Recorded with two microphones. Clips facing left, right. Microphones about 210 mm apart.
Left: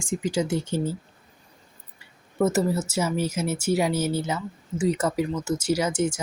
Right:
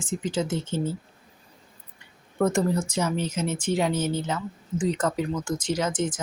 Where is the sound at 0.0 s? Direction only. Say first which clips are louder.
Left 2 dB; 10° left (ahead or behind).